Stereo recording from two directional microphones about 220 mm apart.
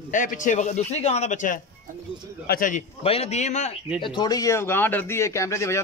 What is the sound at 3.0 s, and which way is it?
Speech, 25° left (ahead or behind).